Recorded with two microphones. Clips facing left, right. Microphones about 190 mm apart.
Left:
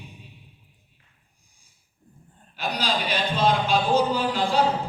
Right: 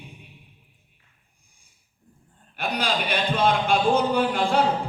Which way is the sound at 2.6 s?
55° right (ahead or behind).